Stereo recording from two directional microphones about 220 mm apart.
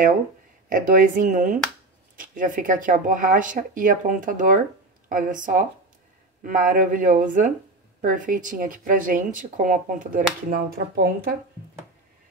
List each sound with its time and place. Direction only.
0.7 s speech: 40° right (ahead or behind)